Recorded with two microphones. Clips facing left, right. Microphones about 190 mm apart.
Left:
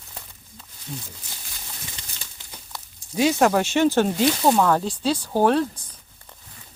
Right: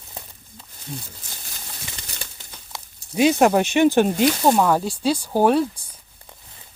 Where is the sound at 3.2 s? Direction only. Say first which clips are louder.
Right 3 dB; 20° right (ahead or behind).